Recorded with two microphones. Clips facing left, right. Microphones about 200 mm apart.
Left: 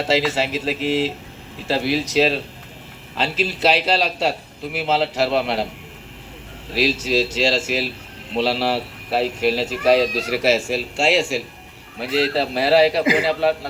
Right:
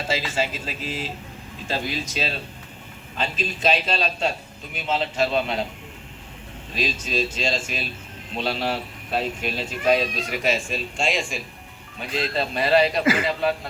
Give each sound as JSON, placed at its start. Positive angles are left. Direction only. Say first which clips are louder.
{"t": 0.0, "sound": "speech", "louder": "left 6 dB", "side_deg": 75}
{"t": 6.7, "sound": "speech", "louder": "left 8 dB", "side_deg": 75}